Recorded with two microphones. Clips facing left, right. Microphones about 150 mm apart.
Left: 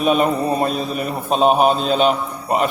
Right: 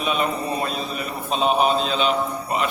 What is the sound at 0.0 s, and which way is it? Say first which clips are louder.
A man's voice: left 7 dB; 45° left (ahead or behind).